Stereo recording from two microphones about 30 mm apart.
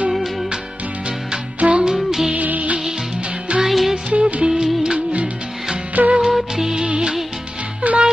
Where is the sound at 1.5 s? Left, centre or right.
Right.